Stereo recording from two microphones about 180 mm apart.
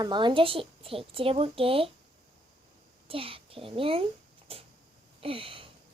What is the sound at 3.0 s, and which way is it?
A child's voice, 30° right (ahead or behind).